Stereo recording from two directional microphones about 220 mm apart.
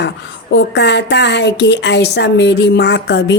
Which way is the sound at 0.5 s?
50° left (ahead or behind).